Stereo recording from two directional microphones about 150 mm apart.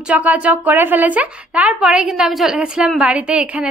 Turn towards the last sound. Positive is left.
turn(degrees=-5)  # may be behind; listen again after turning